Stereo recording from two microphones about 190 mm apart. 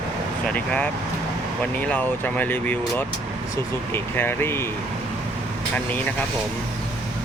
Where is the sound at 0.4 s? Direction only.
5° left (ahead or behind).